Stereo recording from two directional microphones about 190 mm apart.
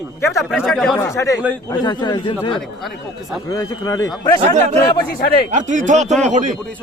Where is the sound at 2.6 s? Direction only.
Centre (ahead or behind).